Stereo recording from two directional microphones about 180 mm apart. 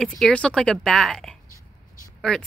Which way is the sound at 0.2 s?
5° left (ahead or behind).